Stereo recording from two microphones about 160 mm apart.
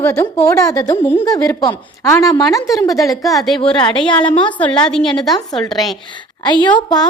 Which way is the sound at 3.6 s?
30° left (ahead or behind).